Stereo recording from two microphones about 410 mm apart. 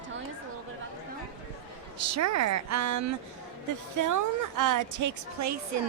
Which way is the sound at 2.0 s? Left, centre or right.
Right.